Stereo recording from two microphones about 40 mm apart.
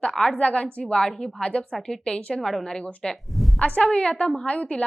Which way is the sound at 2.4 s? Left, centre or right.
Centre.